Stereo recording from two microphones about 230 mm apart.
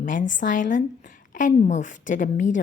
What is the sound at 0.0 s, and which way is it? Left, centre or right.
A woman's voice, left.